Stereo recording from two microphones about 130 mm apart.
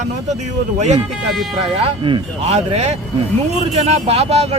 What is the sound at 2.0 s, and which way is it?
Speech, 35° right (ahead or behind).